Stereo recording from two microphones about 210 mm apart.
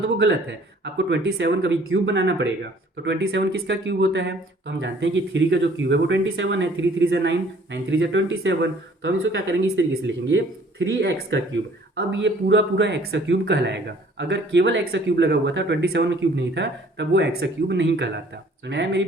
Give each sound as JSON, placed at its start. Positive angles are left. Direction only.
{"t": 0.9, "sound": "speech", "side_deg": -55}